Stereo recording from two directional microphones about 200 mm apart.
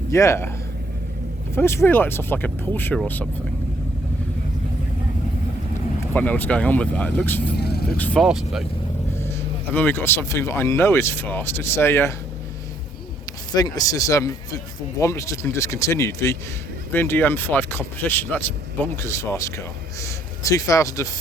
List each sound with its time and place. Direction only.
0.1 s speech: 15° left (ahead or behind)
1.5 s speech: 15° left (ahead or behind)
6.1 s speech: 10° left (ahead or behind)
7.5 s speech: 55° left (ahead or behind)
7.9 s speech: 5° left (ahead or behind)
9.7 s speech: 10° left (ahead or behind)
13.5 s speech: 20° left (ahead or behind)